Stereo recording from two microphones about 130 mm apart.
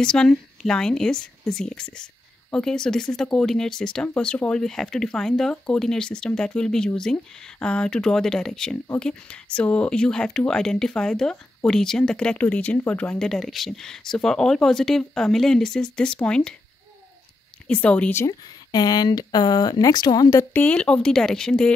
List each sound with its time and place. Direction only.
0.0 s speech: 5° left (ahead or behind)
17.6 s speech: 10° left (ahead or behind)
18.2 s speech: 30° left (ahead or behind)
20.5 s speech: 10° left (ahead or behind)